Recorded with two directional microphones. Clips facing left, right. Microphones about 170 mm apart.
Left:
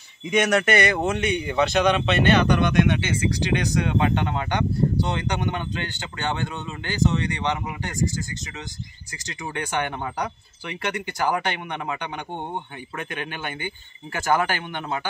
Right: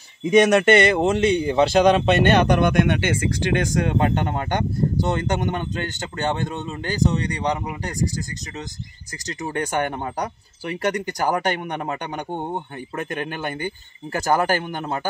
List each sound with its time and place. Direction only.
0.5 s speech: 25° right (ahead or behind)
9.4 s speech: 40° right (ahead or behind)